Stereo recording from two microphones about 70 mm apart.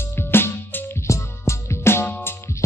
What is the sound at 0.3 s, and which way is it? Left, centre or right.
Music, left.